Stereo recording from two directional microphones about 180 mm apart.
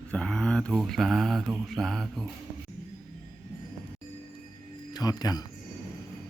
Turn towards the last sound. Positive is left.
turn(degrees=20)  # may be behind; listen again after turning